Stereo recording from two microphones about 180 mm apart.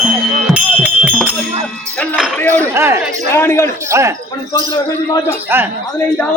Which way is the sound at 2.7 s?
15° right (ahead or behind).